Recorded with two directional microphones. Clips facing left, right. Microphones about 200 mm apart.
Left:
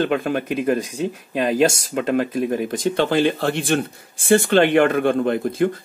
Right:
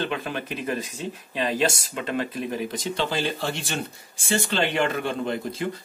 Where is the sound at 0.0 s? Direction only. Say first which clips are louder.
Left 8 dB; 50° left (ahead or behind).